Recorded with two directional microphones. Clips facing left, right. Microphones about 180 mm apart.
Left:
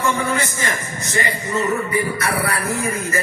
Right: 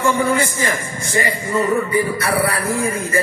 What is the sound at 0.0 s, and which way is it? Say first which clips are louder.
A man's voice: right 4 dB; 30° right (ahead or behind).